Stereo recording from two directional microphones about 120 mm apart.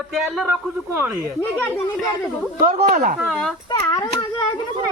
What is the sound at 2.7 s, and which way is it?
Speech, 80° right.